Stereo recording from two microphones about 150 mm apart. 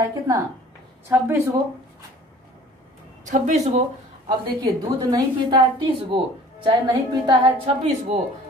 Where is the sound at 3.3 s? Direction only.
50° right (ahead or behind).